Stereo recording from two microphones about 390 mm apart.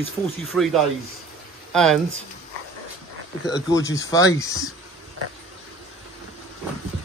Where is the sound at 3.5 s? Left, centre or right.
Centre.